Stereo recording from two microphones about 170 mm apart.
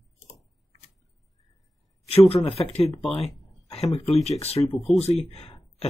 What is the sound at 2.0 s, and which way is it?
Speech, 35° left (ahead or behind).